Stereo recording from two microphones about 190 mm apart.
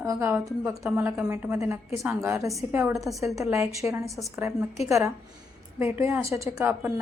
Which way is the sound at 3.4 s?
15° right (ahead or behind).